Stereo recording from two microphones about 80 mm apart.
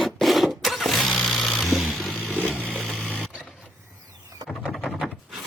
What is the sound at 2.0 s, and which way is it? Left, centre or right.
Vehicle, centre.